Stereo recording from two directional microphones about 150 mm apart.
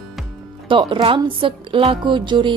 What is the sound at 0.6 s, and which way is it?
Speech, 35° right (ahead or behind).